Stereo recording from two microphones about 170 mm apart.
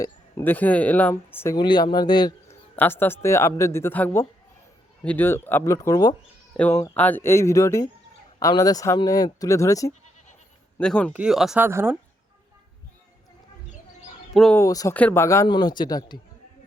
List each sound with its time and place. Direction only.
0.0 s speech: 15° left (ahead or behind)
1.5 s speech: 25° left (ahead or behind)
2.7 s speech: 10° left (ahead or behind)
10.8 s speech: 5° left (ahead or behind); by 11.9 s 15° right (ahead or behind)
14.3 s speech: 5° left (ahead or behind)
14.6 s speech: 20° left (ahead or behind)